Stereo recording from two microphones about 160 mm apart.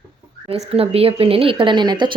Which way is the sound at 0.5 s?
40° right (ahead or behind).